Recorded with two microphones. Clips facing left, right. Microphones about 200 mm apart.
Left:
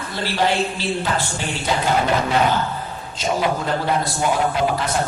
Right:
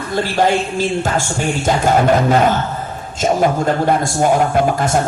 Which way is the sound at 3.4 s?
50° right (ahead or behind).